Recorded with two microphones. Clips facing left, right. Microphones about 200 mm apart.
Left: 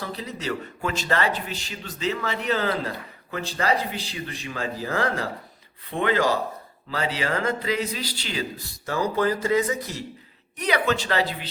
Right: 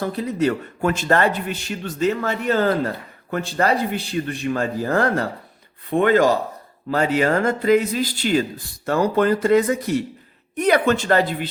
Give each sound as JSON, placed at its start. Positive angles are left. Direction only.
{"t": 0.0, "sound": "a man's voice", "side_deg": -50}